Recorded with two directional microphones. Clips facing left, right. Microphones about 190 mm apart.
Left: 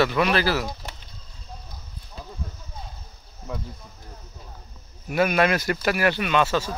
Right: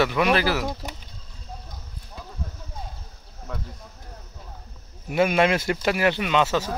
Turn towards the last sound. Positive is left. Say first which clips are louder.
# even
turn(degrees=-20)  # may be behind; listen again after turning